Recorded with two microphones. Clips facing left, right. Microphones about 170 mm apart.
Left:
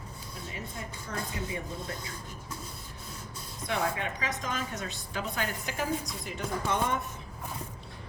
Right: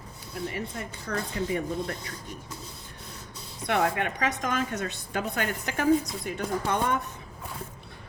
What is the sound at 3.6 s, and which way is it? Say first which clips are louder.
Speech: right 5 dB; 60° right (ahead or behind).